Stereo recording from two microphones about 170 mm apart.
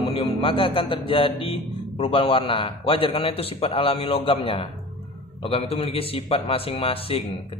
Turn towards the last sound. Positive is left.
turn(degrees=35)  # may be behind; listen again after turning